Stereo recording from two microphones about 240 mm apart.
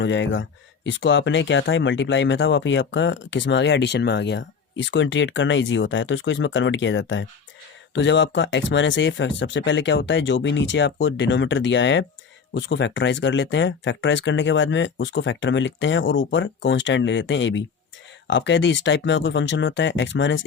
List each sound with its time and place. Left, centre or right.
0.0 s speech: left